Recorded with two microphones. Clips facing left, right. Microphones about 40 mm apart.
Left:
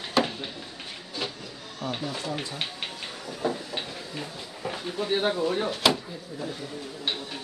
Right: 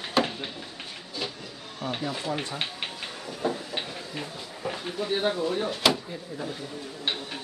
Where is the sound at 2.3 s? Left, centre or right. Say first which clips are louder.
Right 2 dB; right.